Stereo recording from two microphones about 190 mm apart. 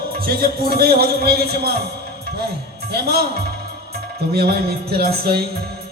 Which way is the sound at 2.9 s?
55° right (ahead or behind).